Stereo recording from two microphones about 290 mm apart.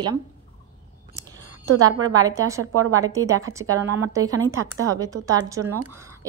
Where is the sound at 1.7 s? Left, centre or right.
Right.